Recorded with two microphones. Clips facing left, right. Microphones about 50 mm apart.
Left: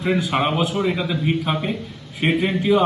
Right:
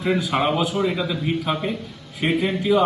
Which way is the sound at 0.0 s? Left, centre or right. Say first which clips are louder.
Left 1 dB; centre.